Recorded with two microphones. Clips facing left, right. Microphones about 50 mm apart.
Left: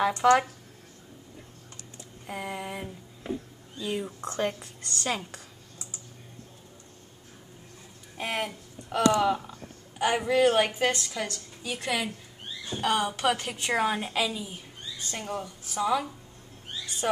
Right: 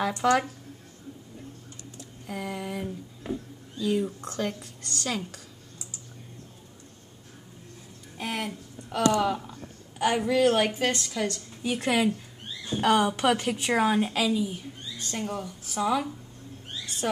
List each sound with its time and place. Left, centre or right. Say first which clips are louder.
0.2 s a sound: left 2 dB; centre
2.2 s a sound: right 1 dB; centre
3.7 s speech: right 5 dB; centre
8.2 s speech: left 1 dB; left
8.5 s a woman's voice: right 2 dB; centre
11.6 s a woman's voice: right 6 dB; centre
16.8 s rodents: even; centre